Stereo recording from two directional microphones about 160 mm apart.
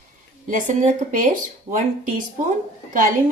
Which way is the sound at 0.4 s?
55° right (ahead or behind).